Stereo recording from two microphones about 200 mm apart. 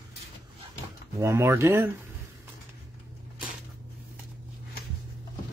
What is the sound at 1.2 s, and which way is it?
Speech, 15° right (ahead or behind).